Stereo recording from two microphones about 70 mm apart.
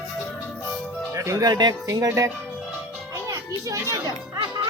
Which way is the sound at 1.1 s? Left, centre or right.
Right.